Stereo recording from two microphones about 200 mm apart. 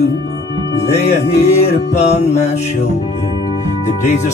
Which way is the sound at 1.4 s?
35° left (ahead or behind).